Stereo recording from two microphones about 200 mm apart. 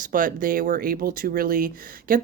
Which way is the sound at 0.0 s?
45° right (ahead or behind).